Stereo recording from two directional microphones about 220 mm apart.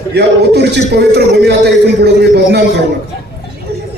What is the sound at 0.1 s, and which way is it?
A man's voice, 50° right (ahead or behind).